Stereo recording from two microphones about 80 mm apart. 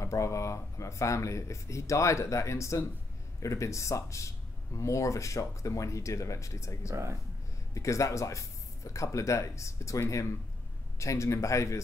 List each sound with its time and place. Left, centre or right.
0.0 s speech: left